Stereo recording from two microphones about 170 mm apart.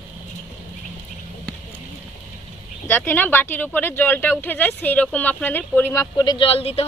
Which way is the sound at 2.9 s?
10° left (ahead or behind).